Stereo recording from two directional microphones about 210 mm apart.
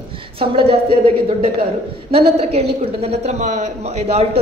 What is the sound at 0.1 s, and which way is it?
A woman's voice, 25° right (ahead or behind).